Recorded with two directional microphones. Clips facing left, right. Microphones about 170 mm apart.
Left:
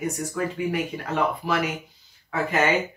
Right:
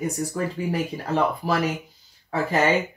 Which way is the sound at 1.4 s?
35° right (ahead or behind).